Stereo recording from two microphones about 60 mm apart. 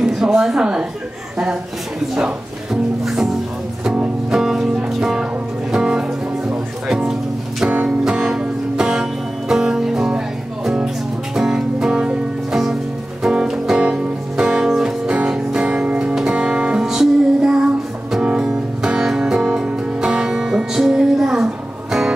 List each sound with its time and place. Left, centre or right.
0.0 s a sound: centre
2.1 s music: centre
3.8 s music: centre
4.3 s music: centre
7.6 s music: centre